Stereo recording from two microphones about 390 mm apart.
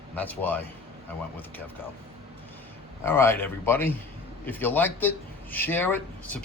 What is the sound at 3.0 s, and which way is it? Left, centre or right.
Speech, centre.